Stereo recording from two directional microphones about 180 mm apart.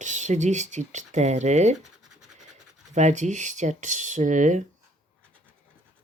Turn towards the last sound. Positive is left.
turn(degrees=-45)  # may be behind; listen again after turning